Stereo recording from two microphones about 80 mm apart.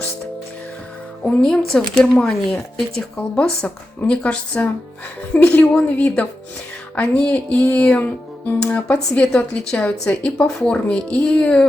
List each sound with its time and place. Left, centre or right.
1.2 s a woman's voice: centre